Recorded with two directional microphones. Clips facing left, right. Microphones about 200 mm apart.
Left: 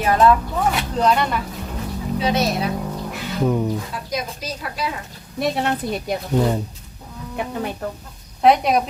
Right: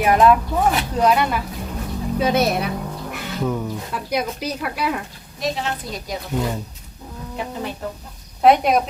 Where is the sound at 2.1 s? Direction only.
50° right (ahead or behind).